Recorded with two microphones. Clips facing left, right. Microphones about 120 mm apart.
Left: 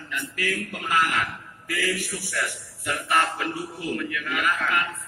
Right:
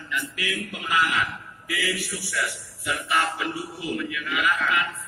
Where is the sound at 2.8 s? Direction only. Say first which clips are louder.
Left 1 dB; 45° left (ahead or behind).